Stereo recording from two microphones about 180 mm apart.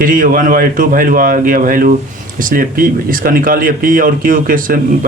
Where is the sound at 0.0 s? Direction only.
50° right (ahead or behind).